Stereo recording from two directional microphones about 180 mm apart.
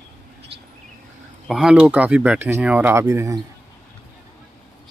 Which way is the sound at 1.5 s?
5° right (ahead or behind).